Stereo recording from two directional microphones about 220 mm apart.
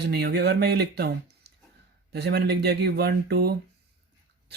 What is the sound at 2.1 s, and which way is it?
Speech, 45° right (ahead or behind).